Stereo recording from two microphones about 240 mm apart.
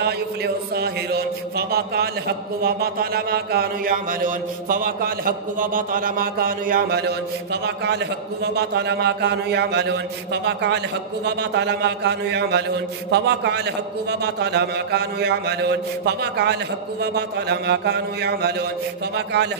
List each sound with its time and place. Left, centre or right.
0.7 s mantra: right